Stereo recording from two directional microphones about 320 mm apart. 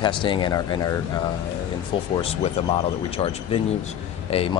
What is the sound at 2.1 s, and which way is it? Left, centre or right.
Speech, centre.